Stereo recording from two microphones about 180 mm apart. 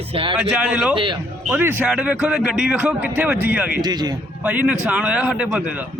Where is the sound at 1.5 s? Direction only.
10° right (ahead or behind).